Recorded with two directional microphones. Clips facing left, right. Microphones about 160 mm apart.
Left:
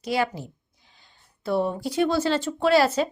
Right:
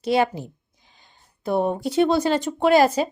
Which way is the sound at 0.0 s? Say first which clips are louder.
Right 5 dB; 25° right (ahead or behind).